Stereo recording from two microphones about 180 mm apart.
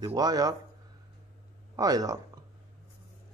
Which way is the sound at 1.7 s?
20° right (ahead or behind).